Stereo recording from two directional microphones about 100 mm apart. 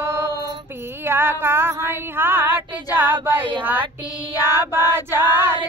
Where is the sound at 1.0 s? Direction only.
20° right (ahead or behind).